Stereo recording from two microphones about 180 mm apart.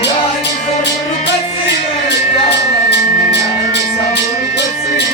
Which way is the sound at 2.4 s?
70° left (ahead or behind).